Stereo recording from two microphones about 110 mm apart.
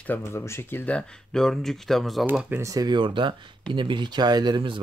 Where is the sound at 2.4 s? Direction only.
25° right (ahead or behind).